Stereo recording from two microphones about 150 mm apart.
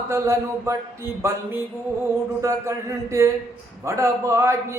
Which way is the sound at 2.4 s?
20° right (ahead or behind).